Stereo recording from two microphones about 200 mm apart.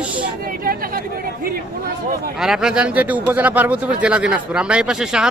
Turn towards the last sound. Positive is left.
turn(degrees=-5)  # may be behind; listen again after turning